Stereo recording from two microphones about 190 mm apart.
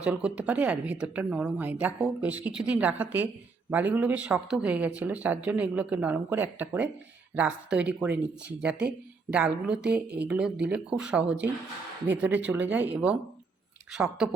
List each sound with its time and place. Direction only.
0.0 s a woman's voice: 5° right (ahead or behind)